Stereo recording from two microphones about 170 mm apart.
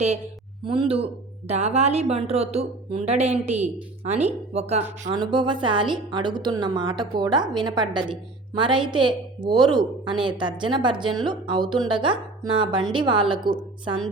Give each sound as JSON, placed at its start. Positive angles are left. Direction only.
{"t": 0.6, "sound": "speech", "side_deg": -30}
{"t": 5.1, "sound": "a woman's voice", "side_deg": -25}